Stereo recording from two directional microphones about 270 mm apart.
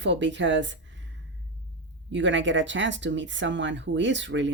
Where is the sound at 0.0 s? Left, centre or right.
Right.